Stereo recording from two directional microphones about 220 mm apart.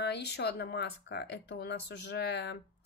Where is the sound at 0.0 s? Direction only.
50° left (ahead or behind).